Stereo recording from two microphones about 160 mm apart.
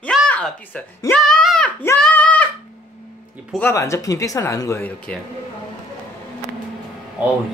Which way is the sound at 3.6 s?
20° left (ahead or behind).